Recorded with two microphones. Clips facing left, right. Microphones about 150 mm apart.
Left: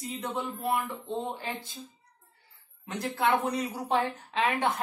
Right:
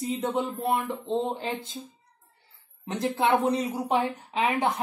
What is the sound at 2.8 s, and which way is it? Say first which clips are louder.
Speech: right 3 dB; 25° right (ahead or behind).